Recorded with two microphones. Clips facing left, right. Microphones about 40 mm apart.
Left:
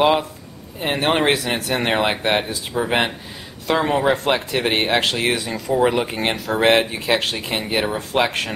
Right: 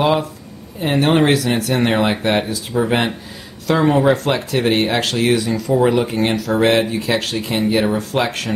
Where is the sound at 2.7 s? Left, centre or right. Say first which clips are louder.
Right 2 dB; centre.